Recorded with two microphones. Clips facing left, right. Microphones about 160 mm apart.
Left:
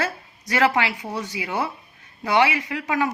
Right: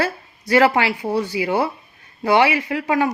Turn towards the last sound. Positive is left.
turn(degrees=-30)  # may be behind; listen again after turning